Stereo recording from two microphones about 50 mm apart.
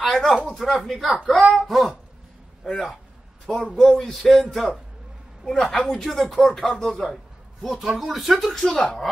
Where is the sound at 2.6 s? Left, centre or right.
Centre.